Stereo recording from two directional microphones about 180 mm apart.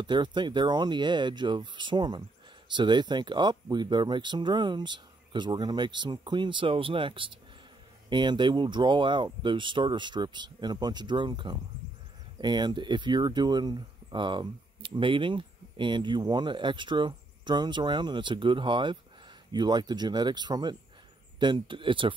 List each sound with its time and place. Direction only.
0.0 s speech: 25° right (ahead or behind)